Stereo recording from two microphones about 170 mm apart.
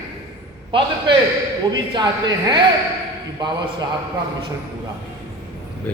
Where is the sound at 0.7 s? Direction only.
30° right (ahead or behind).